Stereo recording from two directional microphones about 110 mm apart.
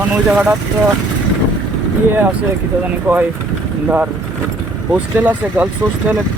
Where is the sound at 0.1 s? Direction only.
10° right (ahead or behind).